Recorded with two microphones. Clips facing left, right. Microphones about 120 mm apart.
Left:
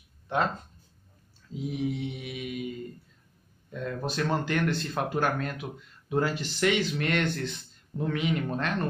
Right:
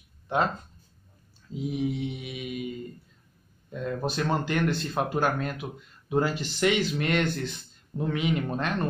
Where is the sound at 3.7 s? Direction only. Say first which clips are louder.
Right 2 dB; 20° right (ahead or behind).